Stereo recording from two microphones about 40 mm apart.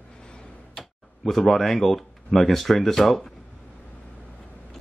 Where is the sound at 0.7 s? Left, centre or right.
Centre.